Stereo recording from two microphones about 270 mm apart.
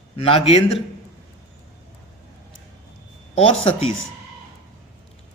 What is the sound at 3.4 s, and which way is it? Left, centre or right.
Speech, left.